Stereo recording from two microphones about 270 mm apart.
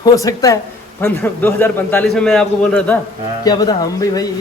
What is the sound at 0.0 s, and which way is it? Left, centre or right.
A man's voice, centre.